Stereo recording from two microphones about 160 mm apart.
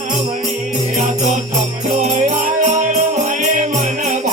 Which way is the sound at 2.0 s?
45° right (ahead or behind).